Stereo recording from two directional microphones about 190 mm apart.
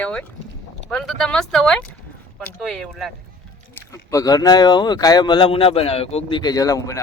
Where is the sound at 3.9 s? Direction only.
20° left (ahead or behind).